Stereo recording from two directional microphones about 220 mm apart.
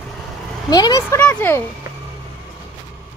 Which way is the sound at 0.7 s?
15° left (ahead or behind).